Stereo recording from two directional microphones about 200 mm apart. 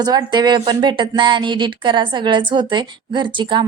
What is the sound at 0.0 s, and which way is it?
A woman's voice, 20° right (ahead or behind).